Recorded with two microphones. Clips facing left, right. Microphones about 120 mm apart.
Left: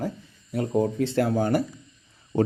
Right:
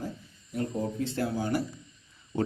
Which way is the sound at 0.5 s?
90° left.